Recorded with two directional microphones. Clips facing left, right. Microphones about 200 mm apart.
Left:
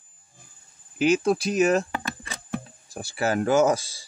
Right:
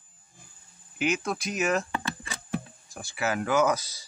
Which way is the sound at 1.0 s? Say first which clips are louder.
Left 8 dB; 30° left (ahead or behind).